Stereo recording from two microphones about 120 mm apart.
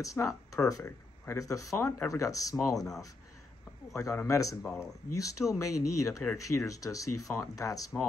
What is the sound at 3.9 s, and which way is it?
Speech, 25° left (ahead or behind).